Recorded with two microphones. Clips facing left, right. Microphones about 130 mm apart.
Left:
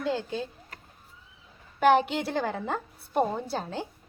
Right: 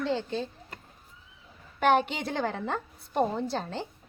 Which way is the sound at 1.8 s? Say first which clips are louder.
Left 2 dB; 5° left (ahead or behind).